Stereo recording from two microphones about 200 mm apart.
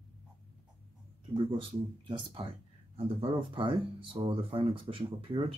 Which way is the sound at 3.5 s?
25° right (ahead or behind).